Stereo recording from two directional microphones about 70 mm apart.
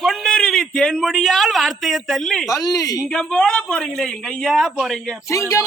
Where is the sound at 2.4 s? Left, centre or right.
Left.